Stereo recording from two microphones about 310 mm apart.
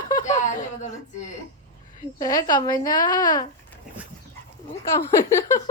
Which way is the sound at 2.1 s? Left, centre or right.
Centre.